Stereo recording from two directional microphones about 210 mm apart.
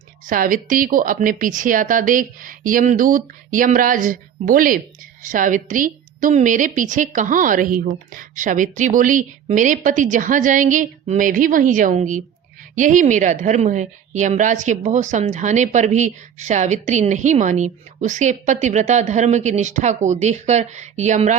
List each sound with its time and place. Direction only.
0.3 s a woman's voice: 40° right (ahead or behind)